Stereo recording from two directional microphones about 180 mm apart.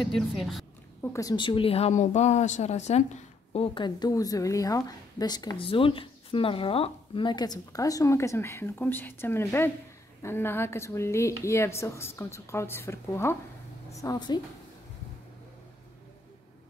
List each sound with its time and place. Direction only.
0.0 s a woman's voice: centre (ahead or behind)
1.1 s a woman's voice: 20° left (ahead or behind)